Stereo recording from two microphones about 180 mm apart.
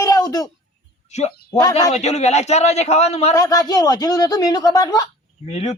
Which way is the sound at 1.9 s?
35° left (ahead or behind).